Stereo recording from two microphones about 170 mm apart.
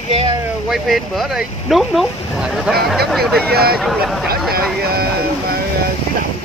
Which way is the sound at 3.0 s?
Centre (ahead or behind).